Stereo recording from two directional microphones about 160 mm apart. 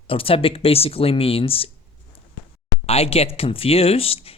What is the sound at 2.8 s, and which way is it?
Speech, 40° left (ahead or behind).